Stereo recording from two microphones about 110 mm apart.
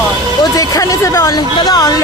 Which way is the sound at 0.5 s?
30° left (ahead or behind).